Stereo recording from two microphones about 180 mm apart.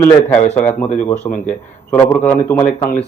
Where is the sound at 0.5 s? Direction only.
10° left (ahead or behind).